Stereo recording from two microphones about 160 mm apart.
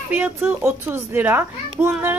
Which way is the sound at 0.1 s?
10° right (ahead or behind).